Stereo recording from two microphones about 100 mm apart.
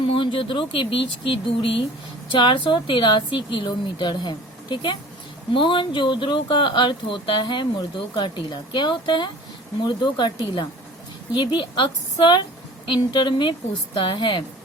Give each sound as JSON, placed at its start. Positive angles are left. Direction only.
{"t": 0.0, "sound": "speech", "side_deg": 60}